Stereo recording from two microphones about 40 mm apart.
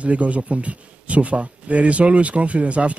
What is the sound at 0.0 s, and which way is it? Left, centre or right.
A man's voice, right.